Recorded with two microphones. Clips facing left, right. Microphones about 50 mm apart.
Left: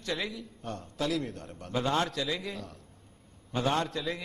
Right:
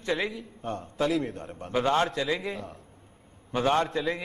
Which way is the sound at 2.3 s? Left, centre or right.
Centre.